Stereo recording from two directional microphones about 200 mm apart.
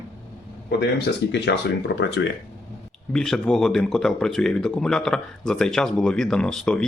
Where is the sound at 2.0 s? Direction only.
65° left (ahead or behind).